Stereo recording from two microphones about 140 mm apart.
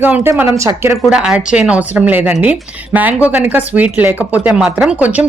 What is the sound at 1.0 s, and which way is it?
Speech, 5° right (ahead or behind).